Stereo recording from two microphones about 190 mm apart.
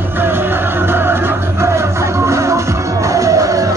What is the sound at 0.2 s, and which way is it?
Music, 10° right (ahead or behind).